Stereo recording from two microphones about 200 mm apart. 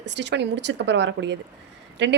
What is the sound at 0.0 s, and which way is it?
A woman's voice, 60° right (ahead or behind).